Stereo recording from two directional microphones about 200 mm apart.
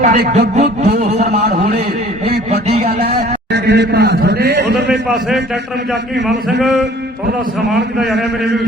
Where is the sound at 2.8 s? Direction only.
50° right (ahead or behind).